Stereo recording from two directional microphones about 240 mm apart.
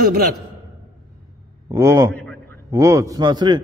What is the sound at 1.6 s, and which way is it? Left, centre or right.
Speech, centre.